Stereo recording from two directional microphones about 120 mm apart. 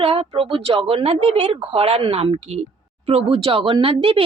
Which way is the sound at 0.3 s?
50° right (ahead or behind).